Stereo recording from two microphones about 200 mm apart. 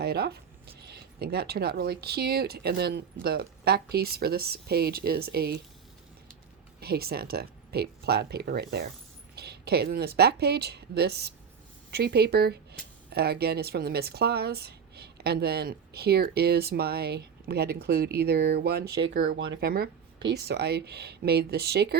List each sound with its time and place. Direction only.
0.0 s zipper: 55° right (ahead or behind)
0.8 s speech: 55° right (ahead or behind)
6.7 s speech: 50° right (ahead or behind)
18.9 s speech: 70° right (ahead or behind)
19.6 s speech: 50° right (ahead or behind)